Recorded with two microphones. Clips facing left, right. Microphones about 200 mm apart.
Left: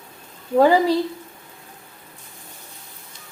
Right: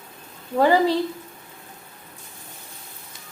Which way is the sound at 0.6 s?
10° left (ahead or behind).